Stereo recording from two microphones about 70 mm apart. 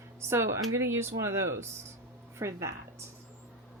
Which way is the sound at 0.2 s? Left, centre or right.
Right.